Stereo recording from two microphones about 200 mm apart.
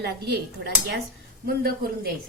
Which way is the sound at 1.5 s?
50° right (ahead or behind).